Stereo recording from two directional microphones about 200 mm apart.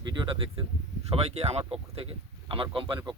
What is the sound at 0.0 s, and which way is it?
Speech, 20° right (ahead or behind).